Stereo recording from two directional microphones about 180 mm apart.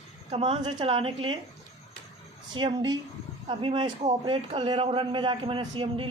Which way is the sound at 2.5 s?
25° right (ahead or behind).